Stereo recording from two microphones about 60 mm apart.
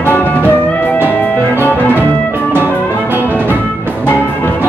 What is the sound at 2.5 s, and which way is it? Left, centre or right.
Music, right.